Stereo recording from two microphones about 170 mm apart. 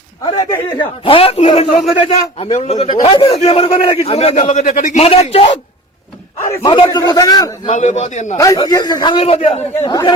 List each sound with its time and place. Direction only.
0.3 s a man's voice: 20° left (ahead or behind)
1.0 s a man's voice: 35° left (ahead or behind)
6.4 s a man's voice: 15° left (ahead or behind)
7.7 s a man's voice: 45° left (ahead or behind)
8.4 s a man's voice: 20° left (ahead or behind)
9.9 s a man's voice: 20° left (ahead or behind)